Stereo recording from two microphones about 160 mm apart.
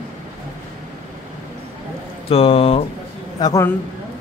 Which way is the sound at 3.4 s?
20° left (ahead or behind).